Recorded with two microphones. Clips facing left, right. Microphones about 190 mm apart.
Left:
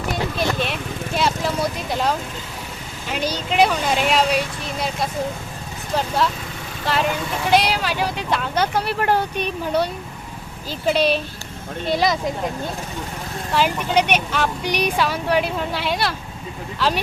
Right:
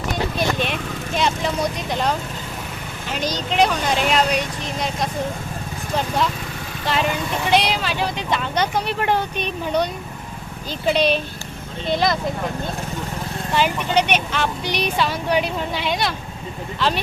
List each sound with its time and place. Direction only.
0.6 s vehicle: 5° left (ahead or behind)
3.1 s speech: 10° left (ahead or behind)
6.8 s speech: centre (ahead or behind)
13.5 s speech: 5° left (ahead or behind)